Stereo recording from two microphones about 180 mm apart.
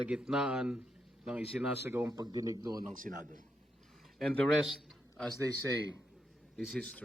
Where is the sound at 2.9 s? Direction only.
50° right (ahead or behind).